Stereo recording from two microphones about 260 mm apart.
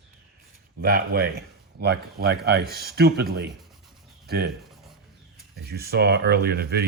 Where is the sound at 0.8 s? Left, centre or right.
Right.